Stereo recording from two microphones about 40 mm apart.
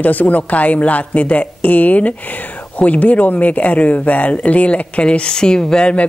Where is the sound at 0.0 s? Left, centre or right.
Left.